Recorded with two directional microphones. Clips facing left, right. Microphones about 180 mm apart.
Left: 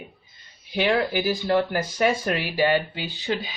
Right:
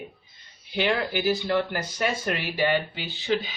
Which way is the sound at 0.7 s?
45° left (ahead or behind).